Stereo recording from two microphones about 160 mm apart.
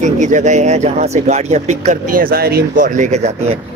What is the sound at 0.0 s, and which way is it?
Speech, 50° right (ahead or behind).